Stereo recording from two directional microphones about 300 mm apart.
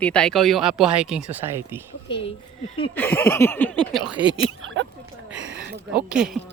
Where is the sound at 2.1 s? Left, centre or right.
Centre.